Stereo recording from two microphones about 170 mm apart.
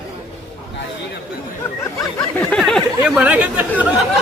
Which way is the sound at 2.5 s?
Centre (ahead or behind).